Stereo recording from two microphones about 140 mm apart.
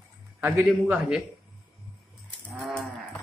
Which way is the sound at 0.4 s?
15° right (ahead or behind).